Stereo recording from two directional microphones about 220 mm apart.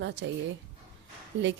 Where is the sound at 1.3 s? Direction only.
55° right (ahead or behind).